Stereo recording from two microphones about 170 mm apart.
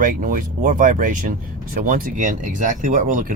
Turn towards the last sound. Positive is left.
turn(degrees=-55)  # may be behind; listen again after turning